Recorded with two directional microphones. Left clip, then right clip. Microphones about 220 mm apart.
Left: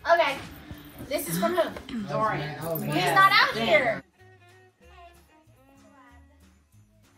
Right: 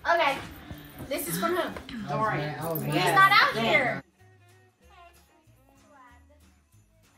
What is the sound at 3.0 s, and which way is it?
Music, centre (ahead or behind).